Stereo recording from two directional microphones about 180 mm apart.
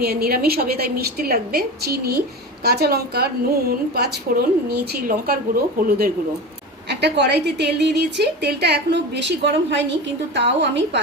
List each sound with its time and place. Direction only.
0.0 s a woman's voice: 60° right (ahead or behind)
7.0 s a woman's voice: 70° right (ahead or behind)